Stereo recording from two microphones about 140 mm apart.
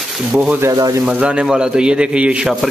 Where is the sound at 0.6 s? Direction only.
25° right (ahead or behind).